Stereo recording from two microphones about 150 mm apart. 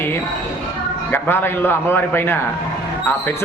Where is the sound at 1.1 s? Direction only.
15° left (ahead or behind).